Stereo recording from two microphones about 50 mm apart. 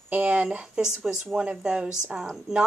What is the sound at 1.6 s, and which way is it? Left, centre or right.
Speech, centre.